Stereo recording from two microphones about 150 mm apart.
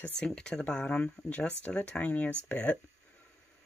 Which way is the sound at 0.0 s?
5° left (ahead or behind).